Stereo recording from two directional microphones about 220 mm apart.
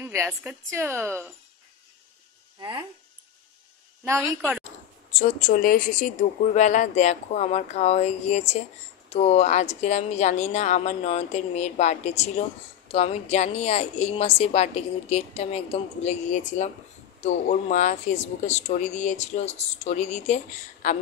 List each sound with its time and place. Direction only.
0.0 s a woman's voice: 10° right (ahead or behind)
4.0 s a woman's voice: 15° right (ahead or behind)
5.1 s a woman's voice: 35° left (ahead or behind)